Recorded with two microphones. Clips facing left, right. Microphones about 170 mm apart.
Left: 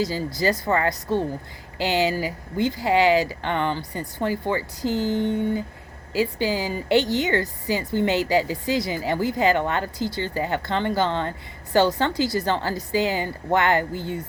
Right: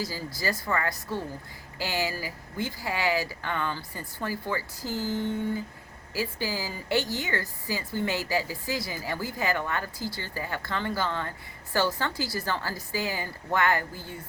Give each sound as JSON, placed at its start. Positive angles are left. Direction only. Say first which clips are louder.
{"t": 0.0, "sound": "speech", "louder": "left 8 dB", "side_deg": 25}